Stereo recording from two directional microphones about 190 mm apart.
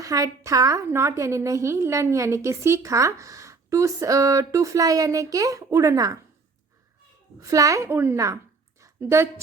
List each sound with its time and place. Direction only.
0.0 s a woman's voice: 15° right (ahead or behind)
7.3 s a woman's voice: 15° right (ahead or behind)
8.8 s a sound: 15° right (ahead or behind)